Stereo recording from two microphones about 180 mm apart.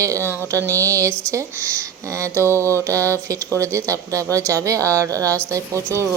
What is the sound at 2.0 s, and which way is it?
A woman's voice, 15° right (ahead or behind).